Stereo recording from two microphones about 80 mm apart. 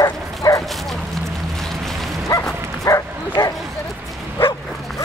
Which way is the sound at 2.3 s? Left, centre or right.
Left.